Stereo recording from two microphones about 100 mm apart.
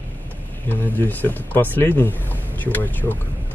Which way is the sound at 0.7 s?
15° left (ahead or behind).